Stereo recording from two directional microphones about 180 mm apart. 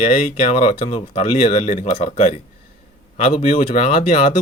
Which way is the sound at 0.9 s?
40° left (ahead or behind).